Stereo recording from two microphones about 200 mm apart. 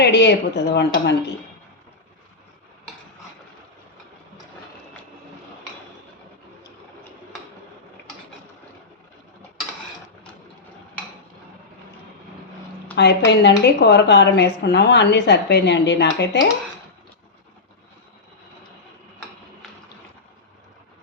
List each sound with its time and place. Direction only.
0.0 s speech: 55° left (ahead or behind)
13.0 s speech: 55° left (ahead or behind)